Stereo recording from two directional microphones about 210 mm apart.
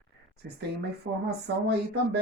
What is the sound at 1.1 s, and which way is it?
Speech, 70° right (ahead or behind).